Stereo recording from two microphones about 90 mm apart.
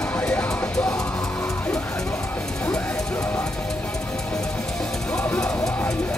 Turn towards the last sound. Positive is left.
turn(degrees=20)  # may be behind; listen again after turning